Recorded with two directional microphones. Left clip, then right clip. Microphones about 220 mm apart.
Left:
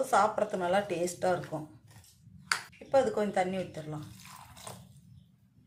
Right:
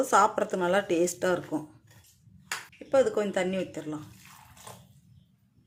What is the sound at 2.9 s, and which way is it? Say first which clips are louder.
Speech: right 3 dB; 40° right (ahead or behind).